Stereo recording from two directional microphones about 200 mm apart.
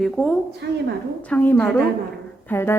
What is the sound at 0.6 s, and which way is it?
Speech, 55° right (ahead or behind).